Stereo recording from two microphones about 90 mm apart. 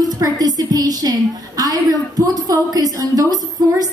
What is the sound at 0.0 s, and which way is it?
A woman's voice, 45° right (ahead or behind).